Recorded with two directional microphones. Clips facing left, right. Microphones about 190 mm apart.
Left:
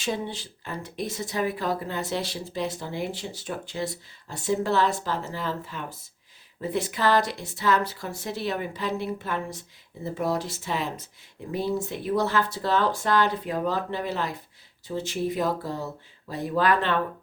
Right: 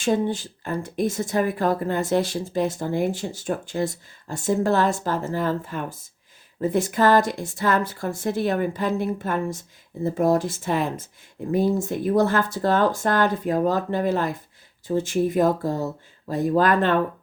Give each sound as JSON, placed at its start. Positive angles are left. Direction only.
{"t": 0.0, "sound": "speech", "side_deg": -50}